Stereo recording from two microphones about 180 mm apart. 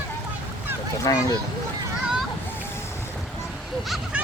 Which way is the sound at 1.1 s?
20° left (ahead or behind).